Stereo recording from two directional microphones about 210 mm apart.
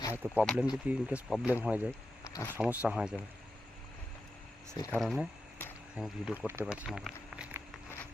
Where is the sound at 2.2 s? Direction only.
15° left (ahead or behind).